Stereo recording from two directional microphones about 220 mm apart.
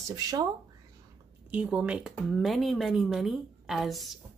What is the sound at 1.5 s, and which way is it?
Speech, 5° right (ahead or behind).